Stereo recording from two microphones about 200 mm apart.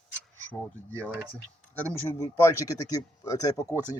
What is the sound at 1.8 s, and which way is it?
Speech, 10° left (ahead or behind).